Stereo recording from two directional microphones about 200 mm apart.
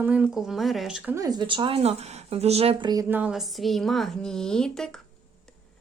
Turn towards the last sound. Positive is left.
turn(degrees=5)  # may be behind; listen again after turning